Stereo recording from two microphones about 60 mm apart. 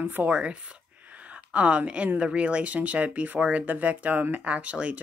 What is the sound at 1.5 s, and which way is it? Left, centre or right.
A woman's voice, right.